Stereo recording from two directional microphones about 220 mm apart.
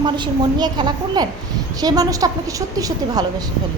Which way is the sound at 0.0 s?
20° right (ahead or behind).